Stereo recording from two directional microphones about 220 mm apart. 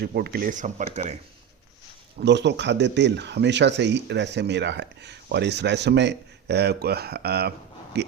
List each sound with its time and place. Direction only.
0.0 s speech: 45° right (ahead or behind)
2.1 s speech: 50° right (ahead or behind)